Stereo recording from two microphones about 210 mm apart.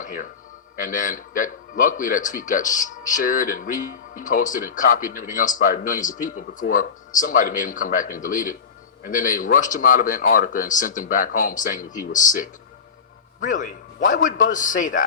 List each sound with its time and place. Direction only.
0.0 s a man's voice: 40° left (ahead or behind)